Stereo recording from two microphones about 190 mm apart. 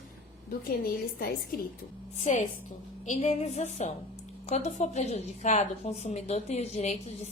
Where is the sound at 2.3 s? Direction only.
40° left (ahead or behind).